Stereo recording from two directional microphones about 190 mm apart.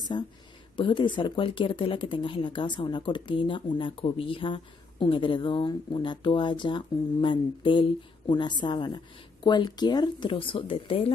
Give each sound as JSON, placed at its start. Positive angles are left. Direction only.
{"t": 0.1, "sound": "speech", "side_deg": 25}